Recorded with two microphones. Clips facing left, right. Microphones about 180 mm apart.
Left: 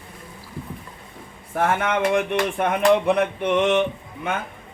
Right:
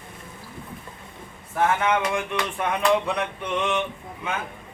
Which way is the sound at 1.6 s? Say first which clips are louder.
Left 1 dB; 50° left (ahead or behind).